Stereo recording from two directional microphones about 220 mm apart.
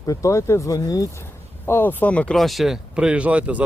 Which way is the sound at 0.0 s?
15° left (ahead or behind).